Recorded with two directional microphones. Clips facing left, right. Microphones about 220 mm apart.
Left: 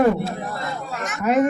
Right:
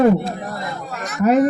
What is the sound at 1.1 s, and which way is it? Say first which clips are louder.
Speech: right 4 dB; 35° right (ahead or behind).